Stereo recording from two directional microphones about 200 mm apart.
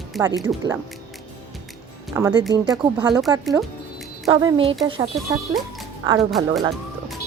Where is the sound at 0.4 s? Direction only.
20° right (ahead or behind).